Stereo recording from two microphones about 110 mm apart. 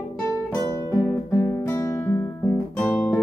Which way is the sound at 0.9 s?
25° left (ahead or behind).